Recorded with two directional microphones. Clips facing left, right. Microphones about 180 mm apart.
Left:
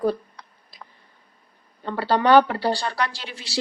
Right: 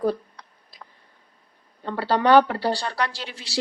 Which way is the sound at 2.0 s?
40° right (ahead or behind).